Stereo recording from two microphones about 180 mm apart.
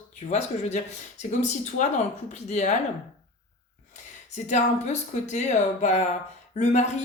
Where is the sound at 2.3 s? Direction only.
40° left (ahead or behind).